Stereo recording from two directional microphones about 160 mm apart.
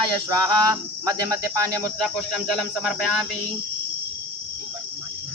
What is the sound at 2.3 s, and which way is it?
Speech, 5° right (ahead or behind).